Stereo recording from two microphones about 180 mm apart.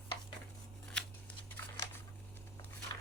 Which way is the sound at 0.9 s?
5° left (ahead or behind).